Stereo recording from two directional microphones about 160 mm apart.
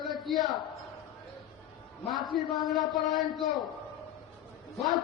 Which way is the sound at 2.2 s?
30° left (ahead or behind).